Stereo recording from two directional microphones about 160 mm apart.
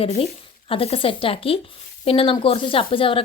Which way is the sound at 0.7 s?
35° left (ahead or behind).